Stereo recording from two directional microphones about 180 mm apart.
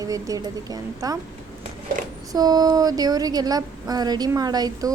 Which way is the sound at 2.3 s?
20° right (ahead or behind).